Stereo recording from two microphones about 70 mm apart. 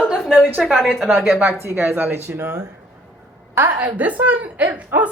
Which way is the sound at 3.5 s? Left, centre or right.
Right.